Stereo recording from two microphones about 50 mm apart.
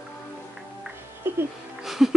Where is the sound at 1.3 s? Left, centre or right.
Right.